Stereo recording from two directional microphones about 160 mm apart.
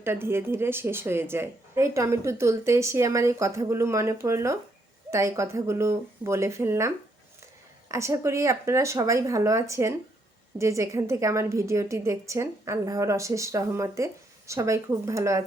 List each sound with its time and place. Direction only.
0.0 s a woman's voice: 15° right (ahead or behind)